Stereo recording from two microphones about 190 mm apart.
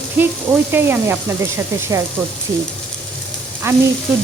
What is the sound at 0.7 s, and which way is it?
Frying, 10° right (ahead or behind).